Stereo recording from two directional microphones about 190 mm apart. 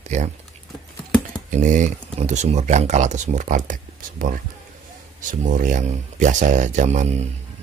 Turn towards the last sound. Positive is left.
turn(degrees=-35)  # may be behind; listen again after turning